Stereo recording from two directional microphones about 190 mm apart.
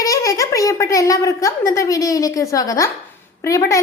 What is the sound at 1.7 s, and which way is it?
A woman's voice, 15° left (ahead or behind).